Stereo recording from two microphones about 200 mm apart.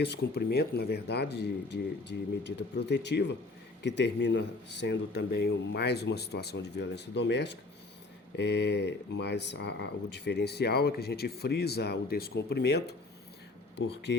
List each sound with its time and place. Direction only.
0.0 s speech: 55° left (ahead or behind)